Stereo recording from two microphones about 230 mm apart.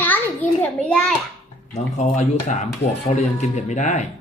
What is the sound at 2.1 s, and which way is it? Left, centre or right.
Speech, left.